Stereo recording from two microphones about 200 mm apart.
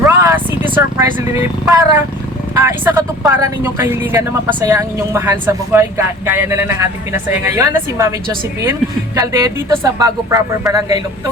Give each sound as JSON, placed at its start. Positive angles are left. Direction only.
{"t": 0.0, "sound": "vehicle", "side_deg": -15}
{"t": 0.7, "sound": "speech", "side_deg": -15}
{"t": 9.2, "sound": "speech", "side_deg": -15}